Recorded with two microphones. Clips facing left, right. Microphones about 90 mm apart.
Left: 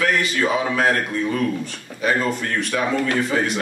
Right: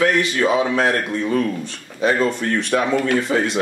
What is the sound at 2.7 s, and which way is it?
Speech, 30° right (ahead or behind).